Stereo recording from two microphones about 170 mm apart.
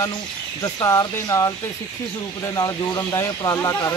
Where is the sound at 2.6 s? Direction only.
20° left (ahead or behind).